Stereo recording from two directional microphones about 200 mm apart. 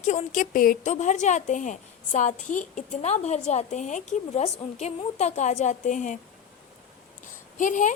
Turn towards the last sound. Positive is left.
turn(degrees=40)  # may be behind; listen again after turning